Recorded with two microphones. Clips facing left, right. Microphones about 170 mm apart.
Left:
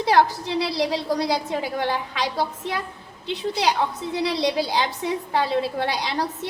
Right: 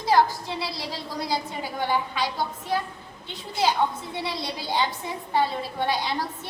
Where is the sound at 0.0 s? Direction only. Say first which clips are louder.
Left 2 dB; 70° left (ahead or behind).